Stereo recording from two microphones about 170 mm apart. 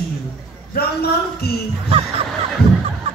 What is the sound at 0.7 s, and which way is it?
Speech, 65° left (ahead or behind).